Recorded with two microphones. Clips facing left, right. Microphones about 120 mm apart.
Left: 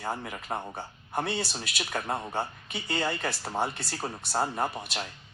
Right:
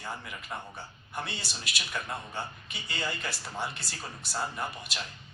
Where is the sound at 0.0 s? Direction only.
45° left (ahead or behind).